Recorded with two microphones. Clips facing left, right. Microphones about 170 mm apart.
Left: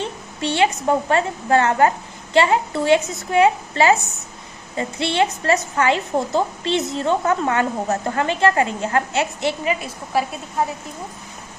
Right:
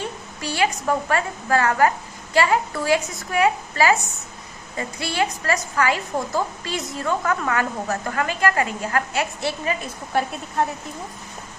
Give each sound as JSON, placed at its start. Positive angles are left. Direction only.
{"t": 0.0, "sound": "a woman's voice", "side_deg": 25}